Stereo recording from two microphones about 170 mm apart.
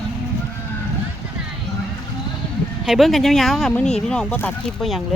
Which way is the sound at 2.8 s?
Centre (ahead or behind).